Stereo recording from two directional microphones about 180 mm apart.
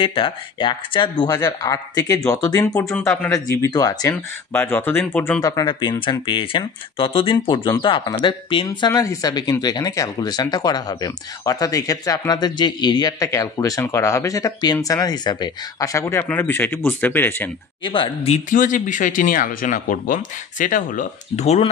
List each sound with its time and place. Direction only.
0.0 s speech: 30° left (ahead or behind); by 17.5 s 10° left (ahead or behind)
17.8 s speech: 25° left (ahead or behind)
18.5 s speech: 45° left (ahead or behind)